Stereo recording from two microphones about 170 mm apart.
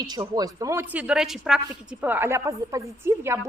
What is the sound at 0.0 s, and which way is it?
A woman's voice, 25° right (ahead or behind).